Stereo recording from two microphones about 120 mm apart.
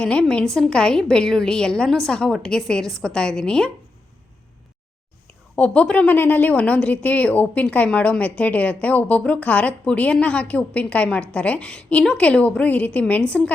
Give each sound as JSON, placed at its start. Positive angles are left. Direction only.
{"t": 0.0, "sound": "a woman's voice", "side_deg": 10}
{"t": 5.5, "sound": "a woman's voice", "side_deg": 10}